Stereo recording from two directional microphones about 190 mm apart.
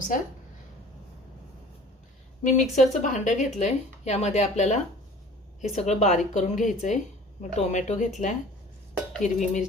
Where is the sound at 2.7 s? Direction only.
40° left (ahead or behind).